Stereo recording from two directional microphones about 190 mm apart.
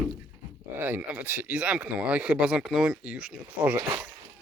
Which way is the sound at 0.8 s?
10° right (ahead or behind).